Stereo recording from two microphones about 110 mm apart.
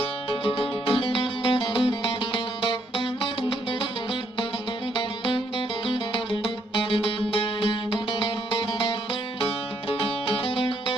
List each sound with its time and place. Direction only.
0.0 s music: 55° left (ahead or behind)
4.9 s music: 50° left (ahead or behind)